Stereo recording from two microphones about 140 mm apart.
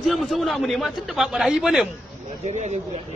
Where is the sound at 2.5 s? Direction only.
55° right (ahead or behind).